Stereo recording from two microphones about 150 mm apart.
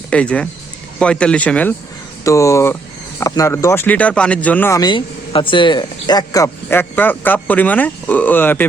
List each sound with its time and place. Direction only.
0.1 s speech: 10° left (ahead or behind)
2.2 s speech: 20° left (ahead or behind)
4.8 s speech: 30° left (ahead or behind); by 8.6 s 15° left (ahead or behind)